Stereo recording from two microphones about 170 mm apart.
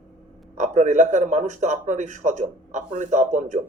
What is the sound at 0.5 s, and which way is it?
A man's voice, 45° right (ahead or behind).